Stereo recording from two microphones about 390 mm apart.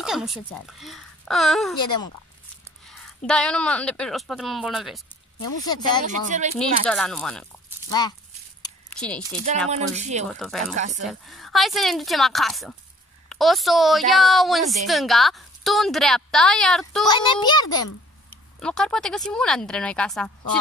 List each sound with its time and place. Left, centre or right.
0.0 s a woman's voice: centre
5.7 s a child's voice: centre
6.0 s speech: centre
6.6 s a woman's voice: centre
8.6 s a sound: centre
9.7 s speech: centre
10.2 s a woman's voice: centre
10.7 s speech: centre
11.1 s a woman's voice: centre